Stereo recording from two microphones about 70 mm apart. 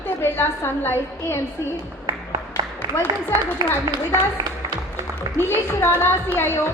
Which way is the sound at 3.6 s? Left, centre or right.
Right.